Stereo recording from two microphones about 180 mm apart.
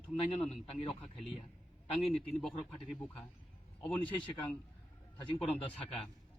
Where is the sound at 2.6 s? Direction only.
5° left (ahead or behind).